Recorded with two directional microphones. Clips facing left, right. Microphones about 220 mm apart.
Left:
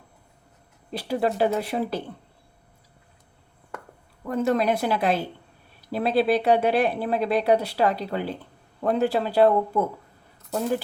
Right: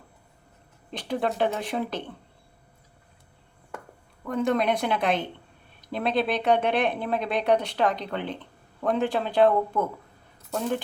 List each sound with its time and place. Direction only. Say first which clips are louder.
0.9 s speech: left 3 dB; 5° left (ahead or behind)
4.3 s speech: left 2 dB; 5° left (ahead or behind)